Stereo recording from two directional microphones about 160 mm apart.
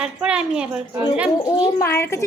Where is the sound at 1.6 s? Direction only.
15° left (ahead or behind).